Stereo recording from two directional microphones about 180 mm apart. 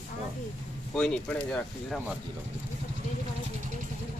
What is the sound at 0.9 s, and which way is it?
Speech, 5° left (ahead or behind).